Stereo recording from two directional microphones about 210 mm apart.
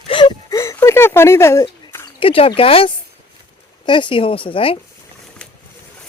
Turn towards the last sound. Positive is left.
turn(degrees=25)  # may be behind; listen again after turning